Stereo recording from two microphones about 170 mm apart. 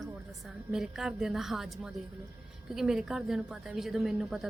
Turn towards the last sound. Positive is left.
turn(degrees=0)  # may be behind; listen again after turning